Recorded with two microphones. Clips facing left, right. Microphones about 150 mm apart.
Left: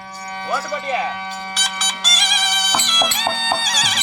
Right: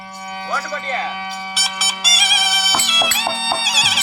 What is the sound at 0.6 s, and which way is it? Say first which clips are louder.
Speech: left 2 dB; 5° left (ahead or behind).